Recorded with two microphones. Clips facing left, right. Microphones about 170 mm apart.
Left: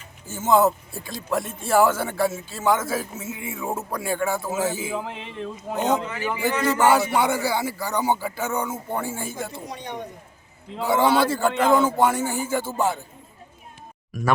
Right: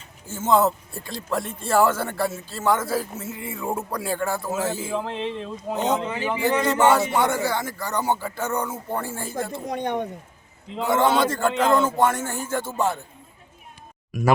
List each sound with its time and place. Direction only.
0.3 s speech: centre (ahead or behind)
6.0 s speech: 25° right (ahead or behind)
7.2 s speech: 5° left (ahead or behind)
9.6 s speech: 55° right (ahead or behind)
10.8 s speech: 5° left (ahead or behind)